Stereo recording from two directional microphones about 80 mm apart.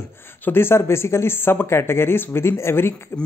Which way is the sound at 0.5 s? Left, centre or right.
Left.